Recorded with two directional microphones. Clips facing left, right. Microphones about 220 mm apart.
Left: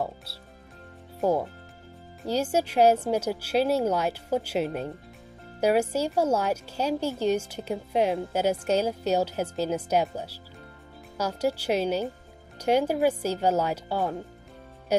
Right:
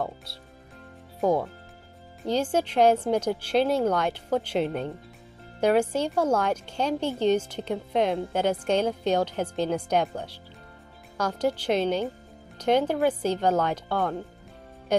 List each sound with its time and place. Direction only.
0.0 s speech: 5° left (ahead or behind)
2.2 s a woman's voice: 10° left (ahead or behind)